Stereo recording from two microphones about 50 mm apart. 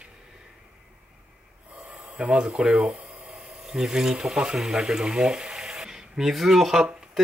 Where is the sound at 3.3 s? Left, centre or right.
Centre.